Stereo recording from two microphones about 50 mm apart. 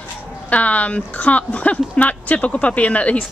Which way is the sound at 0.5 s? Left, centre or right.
Left.